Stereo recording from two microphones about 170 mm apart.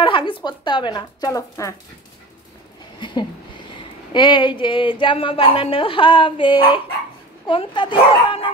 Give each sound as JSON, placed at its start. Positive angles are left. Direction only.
{"t": 0.0, "sound": "a woman's voice", "side_deg": 30}
{"t": 3.0, "sound": "a sound", "side_deg": 25}
{"t": 4.1, "sound": "a woman's voice", "side_deg": 25}